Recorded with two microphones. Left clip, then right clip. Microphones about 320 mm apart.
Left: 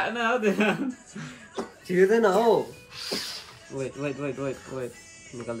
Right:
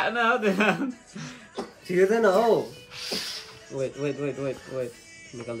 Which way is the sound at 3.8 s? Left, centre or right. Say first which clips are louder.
Right 2 dB; left.